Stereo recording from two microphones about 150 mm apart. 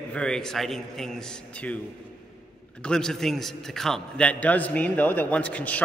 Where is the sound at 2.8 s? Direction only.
5° left (ahead or behind).